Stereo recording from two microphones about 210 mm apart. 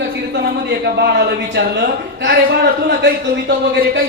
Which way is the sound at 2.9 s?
55° right (ahead or behind).